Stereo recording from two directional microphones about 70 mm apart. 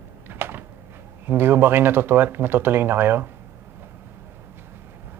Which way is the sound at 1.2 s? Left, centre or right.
Right.